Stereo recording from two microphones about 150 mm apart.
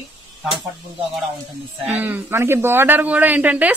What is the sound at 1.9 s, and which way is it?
Speech, 15° right (ahead or behind).